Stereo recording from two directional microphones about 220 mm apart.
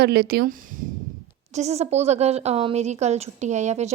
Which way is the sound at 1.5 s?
30° right (ahead or behind).